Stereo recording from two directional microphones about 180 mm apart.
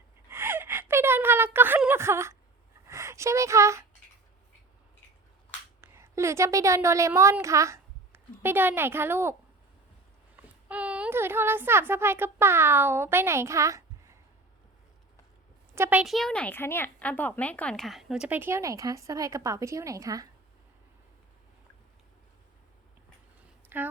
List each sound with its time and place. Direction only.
0.3 s gasp: 15° right (ahead or behind)
2.8 s a sound: 15° right (ahead or behind)
5.8 s a woman's voice: 15° right (ahead or behind)
10.3 s speech: 5° right (ahead or behind)
15.7 s speech: 10° right (ahead or behind)
23.6 s a sound: 10° right (ahead or behind)